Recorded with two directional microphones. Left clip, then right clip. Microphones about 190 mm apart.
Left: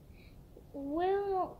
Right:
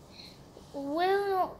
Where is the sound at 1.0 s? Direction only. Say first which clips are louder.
Right 4 dB; 5° left (ahead or behind).